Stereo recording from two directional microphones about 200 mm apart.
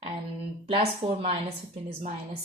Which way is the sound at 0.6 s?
30° right (ahead or behind).